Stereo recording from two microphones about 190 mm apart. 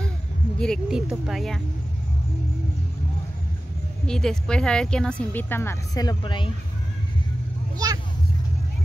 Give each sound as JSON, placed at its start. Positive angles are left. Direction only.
{"t": 0.6, "sound": "a woman's voice", "side_deg": 0}
{"t": 4.0, "sound": "a woman's voice", "side_deg": 5}
{"t": 7.7, "sound": "speech", "side_deg": -20}